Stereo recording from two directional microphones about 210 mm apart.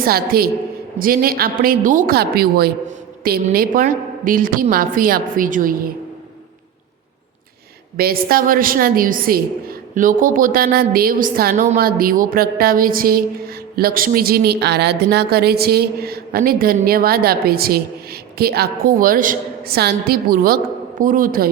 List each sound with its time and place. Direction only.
0.0 s a woman's voice: 45° right (ahead or behind)
7.9 s a woman's voice: 45° right (ahead or behind)